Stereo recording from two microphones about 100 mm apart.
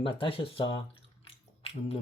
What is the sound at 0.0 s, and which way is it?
Speech, 65° left (ahead or behind).